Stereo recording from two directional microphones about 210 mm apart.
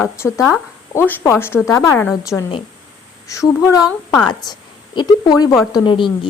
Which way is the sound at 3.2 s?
15° left (ahead or behind).